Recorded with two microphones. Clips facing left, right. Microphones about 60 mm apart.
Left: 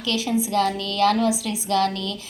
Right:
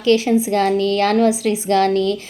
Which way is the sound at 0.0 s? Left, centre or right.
Right.